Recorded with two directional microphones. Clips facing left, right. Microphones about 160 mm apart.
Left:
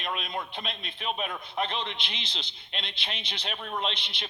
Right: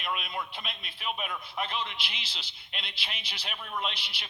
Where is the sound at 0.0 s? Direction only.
35° left (ahead or behind).